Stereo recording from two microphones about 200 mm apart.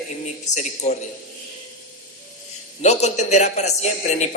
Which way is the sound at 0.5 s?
35° left (ahead or behind).